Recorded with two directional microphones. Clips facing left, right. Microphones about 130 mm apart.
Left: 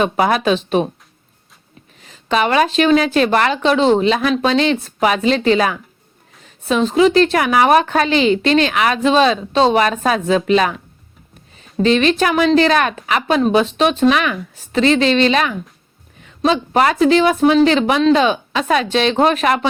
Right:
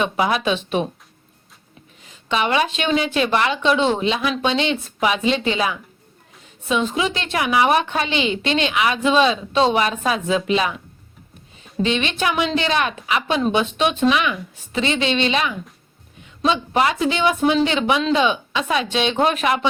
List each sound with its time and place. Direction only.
0.0 s a woman's voice: 45° left (ahead or behind)
2.3 s a woman's voice: 40° left (ahead or behind)
11.8 s a woman's voice: 40° left (ahead or behind)